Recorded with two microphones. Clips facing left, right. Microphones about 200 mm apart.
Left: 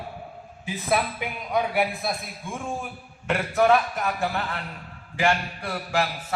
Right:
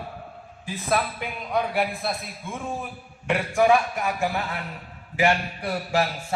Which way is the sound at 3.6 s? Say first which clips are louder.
Even; 5° right (ahead or behind).